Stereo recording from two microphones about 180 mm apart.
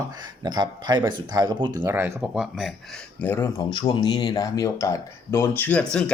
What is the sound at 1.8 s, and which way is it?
Speech, 10° right (ahead or behind).